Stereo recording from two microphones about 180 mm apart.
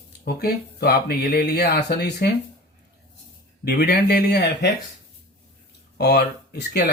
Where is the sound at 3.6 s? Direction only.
60° left (ahead or behind).